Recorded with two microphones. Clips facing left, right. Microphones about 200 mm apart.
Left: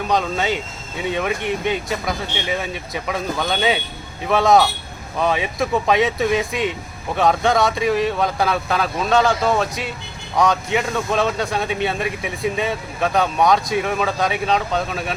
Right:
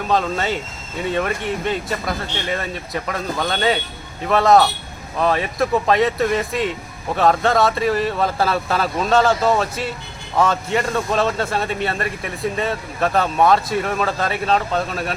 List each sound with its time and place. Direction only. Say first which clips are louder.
0.1 s speech: right 1 dB; centre (ahead or behind)